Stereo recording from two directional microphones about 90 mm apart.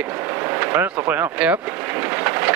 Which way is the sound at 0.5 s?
20° right (ahead or behind).